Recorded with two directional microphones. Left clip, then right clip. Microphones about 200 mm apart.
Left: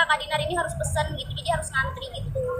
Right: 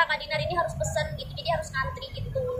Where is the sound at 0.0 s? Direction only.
10° left (ahead or behind).